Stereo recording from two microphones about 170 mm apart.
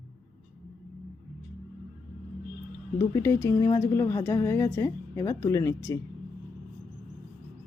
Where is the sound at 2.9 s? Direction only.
15° left (ahead or behind).